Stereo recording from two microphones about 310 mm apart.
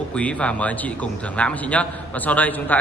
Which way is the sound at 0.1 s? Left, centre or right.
Centre.